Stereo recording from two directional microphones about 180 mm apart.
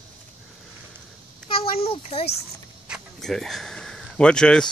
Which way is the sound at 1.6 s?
30° left (ahead or behind).